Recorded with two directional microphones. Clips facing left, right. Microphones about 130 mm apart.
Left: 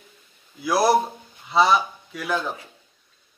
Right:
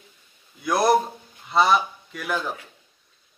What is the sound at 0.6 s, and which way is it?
A man's voice, 5° left (ahead or behind).